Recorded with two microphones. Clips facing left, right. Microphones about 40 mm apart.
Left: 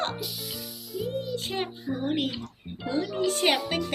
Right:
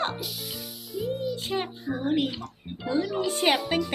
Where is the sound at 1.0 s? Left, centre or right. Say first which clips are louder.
Right 1 dB; centre.